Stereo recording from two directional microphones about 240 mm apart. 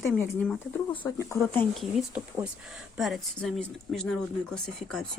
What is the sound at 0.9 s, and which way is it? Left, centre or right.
Speech, centre.